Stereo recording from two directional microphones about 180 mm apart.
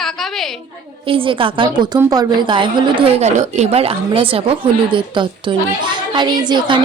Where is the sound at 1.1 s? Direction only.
30° right (ahead or behind).